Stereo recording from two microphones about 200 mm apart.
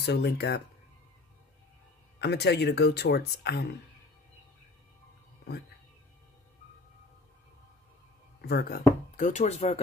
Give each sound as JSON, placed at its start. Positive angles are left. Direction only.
{"t": 0.0, "sound": "speech", "side_deg": 55}
{"t": 2.1, "sound": "speech", "side_deg": 55}
{"t": 8.4, "sound": "speech", "side_deg": 55}